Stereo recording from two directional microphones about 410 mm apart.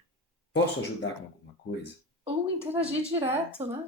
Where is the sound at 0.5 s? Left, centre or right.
Left.